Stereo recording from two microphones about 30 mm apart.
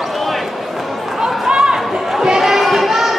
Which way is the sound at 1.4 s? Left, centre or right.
Right.